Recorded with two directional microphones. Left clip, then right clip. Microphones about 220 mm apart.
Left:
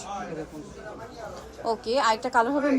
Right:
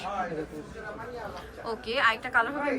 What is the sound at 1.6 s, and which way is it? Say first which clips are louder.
Speech: left 3 dB; 20° left (ahead or behind).